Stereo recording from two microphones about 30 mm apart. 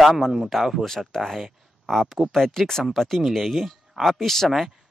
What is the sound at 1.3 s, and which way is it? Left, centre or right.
Speech, centre.